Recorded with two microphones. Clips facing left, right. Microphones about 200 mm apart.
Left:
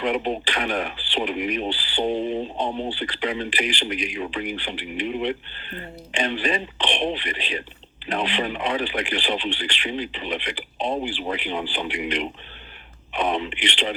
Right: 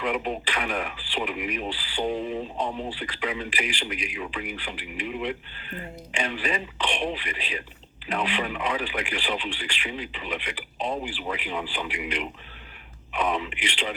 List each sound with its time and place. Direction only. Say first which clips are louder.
0.0 s speech: left 4 dB; 30° left (ahead or behind)